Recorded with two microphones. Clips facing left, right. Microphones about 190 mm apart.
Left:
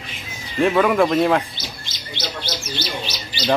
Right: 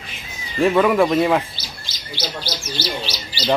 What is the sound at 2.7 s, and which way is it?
Chirp, 30° right (ahead or behind).